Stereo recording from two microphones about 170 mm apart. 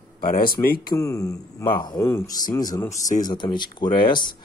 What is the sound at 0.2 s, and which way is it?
Speech, 60° left (ahead or behind).